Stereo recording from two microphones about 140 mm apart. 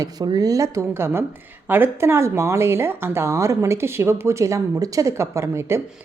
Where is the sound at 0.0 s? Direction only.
25° right (ahead or behind).